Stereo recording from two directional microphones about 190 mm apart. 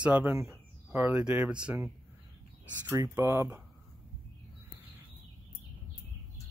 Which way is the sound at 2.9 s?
15° right (ahead or behind).